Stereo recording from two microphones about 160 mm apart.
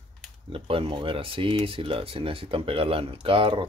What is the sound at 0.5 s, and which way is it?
Speech, 35° right (ahead or behind).